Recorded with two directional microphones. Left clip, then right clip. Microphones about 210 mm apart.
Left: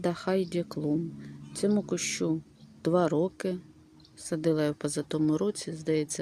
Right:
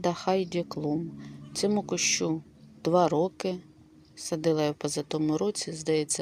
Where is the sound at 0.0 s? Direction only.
15° left (ahead or behind).